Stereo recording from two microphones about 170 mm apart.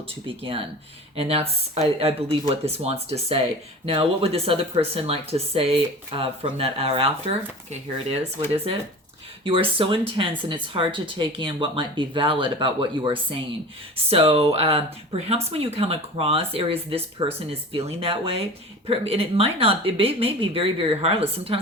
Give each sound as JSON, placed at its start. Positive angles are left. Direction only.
{"t": 0.3, "sound": "speech", "side_deg": -30}
{"t": 9.4, "sound": "speech", "side_deg": -30}